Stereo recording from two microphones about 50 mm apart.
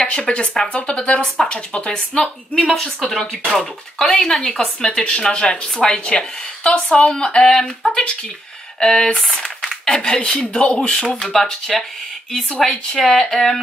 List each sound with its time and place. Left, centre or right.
0.0 s speech: centre
1.2 s speech: centre
1.5 s speech: left
2.6 s speech: centre
9.3 s a sound: centre
9.9 s speech: centre